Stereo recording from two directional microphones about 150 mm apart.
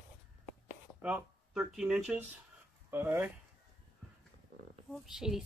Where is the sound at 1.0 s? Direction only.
10° right (ahead or behind).